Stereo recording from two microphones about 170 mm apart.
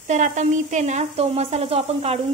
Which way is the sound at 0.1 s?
45° right (ahead or behind).